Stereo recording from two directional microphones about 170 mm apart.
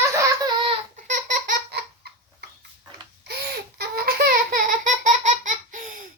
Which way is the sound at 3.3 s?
70° right (ahead or behind).